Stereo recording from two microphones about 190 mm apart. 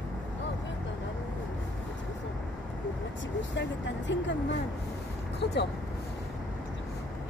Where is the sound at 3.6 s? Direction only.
70° left (ahead or behind).